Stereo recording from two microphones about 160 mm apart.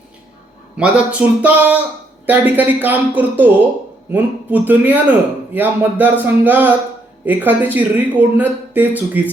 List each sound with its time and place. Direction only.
0.8 s speech: 10° right (ahead or behind)